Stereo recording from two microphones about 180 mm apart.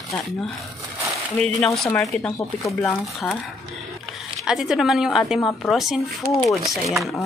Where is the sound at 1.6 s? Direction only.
10° left (ahead or behind).